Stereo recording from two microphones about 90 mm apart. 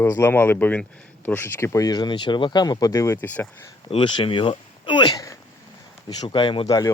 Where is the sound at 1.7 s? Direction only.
45° left (ahead or behind).